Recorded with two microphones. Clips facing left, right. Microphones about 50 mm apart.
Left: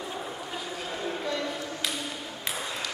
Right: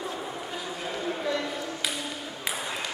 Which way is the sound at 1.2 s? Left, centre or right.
Centre.